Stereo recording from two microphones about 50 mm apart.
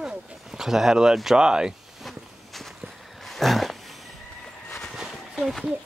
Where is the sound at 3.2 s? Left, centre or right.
Centre.